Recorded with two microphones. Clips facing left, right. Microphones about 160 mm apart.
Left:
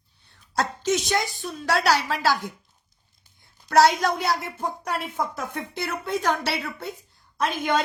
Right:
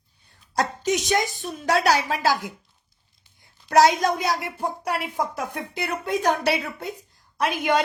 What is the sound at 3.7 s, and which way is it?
Speech, 20° right (ahead or behind).